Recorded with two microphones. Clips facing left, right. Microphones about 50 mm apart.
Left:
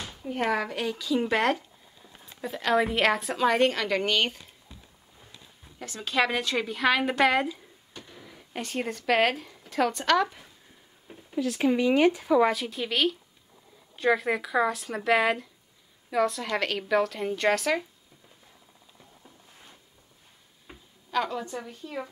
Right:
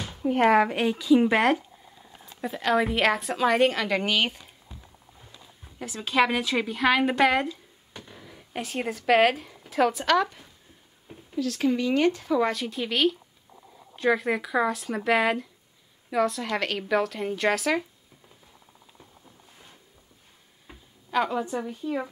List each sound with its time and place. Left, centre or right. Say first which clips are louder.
0.0 s a sound: right 8 dB; centre
0.3 s speech: right 8 dB; right; by 1.6 s centre
2.4 s a woman's voice: right 1 dB; centre
5.8 s a woman's voice: right 3 dB; centre
7.9 s speech: right 2 dB; centre
11.3 s a woman's voice: even; centre
20.7 s tick-tock: even; centre
21.1 s a woman's voice: right 3 dB; centre